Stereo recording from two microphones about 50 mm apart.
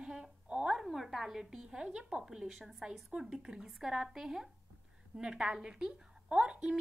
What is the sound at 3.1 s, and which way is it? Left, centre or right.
A woman's voice, centre.